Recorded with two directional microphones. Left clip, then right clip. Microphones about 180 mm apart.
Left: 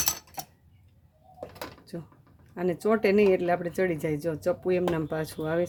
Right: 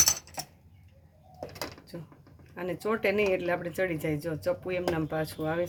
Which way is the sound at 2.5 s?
65° left (ahead or behind).